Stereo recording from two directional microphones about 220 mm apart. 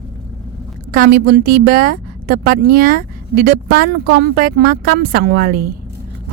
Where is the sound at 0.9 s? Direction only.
45° right (ahead or behind).